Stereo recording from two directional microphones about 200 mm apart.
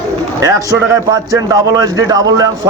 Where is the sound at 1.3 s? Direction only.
15° right (ahead or behind).